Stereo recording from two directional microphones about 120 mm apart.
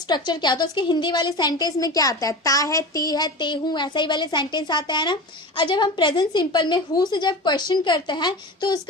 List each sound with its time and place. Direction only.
0.1 s a woman's voice: 35° left (ahead or behind)